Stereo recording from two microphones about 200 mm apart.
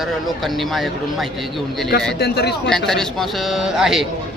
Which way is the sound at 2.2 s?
55° left (ahead or behind).